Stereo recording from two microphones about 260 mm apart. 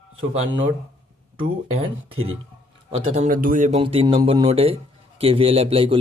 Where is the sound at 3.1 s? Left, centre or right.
Right.